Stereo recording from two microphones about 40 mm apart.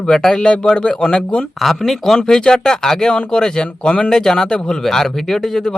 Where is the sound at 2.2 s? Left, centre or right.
Centre.